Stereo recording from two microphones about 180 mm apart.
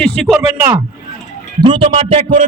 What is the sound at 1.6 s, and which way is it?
Speech, 30° right (ahead or behind).